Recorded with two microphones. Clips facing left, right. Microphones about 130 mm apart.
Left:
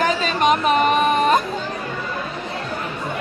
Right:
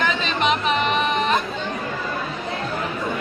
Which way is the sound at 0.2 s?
45° left (ahead or behind).